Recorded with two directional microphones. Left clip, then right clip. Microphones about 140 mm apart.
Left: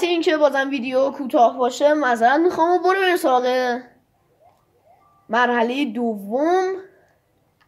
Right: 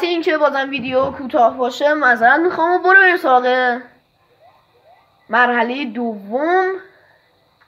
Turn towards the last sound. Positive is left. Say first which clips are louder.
# right 3 dB
turn(degrees=90)